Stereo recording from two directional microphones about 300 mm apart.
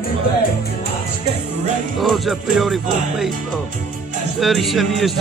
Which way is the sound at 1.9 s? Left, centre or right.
Centre.